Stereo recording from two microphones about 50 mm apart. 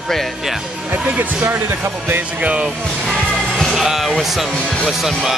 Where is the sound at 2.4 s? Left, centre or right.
Right.